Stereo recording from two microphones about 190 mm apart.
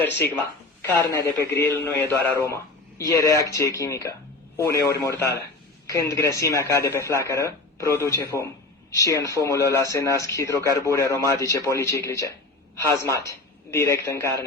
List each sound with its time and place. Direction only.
0.0 s speech: 10° left (ahead or behind)